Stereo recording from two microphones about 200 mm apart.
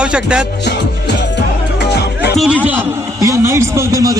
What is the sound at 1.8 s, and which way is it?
Music, 55° left (ahead or behind).